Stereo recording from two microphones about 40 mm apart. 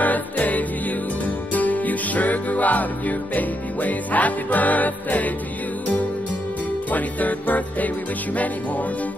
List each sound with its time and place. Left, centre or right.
0.0 s music: left
6.9 s music: left